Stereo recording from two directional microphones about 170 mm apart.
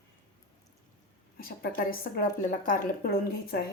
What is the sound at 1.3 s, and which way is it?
A woman's voice, 60° left (ahead or behind).